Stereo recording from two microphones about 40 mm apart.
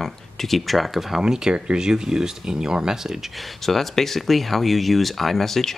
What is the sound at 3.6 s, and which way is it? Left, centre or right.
Speech, centre.